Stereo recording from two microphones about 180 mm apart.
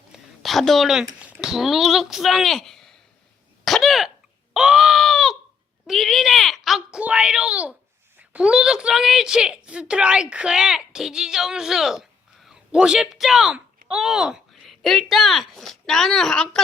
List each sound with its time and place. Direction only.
0.1 s speech: centre (ahead or behind)
3.6 s hiccup: centre (ahead or behind)
4.5 s screaming: 5° right (ahead or behind)
5.9 s a sound: centre (ahead or behind)
8.2 s a woman's voice: 5° right (ahead or behind)